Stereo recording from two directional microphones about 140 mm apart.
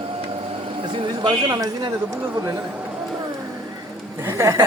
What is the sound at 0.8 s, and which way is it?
Speech, 35° right (ahead or behind).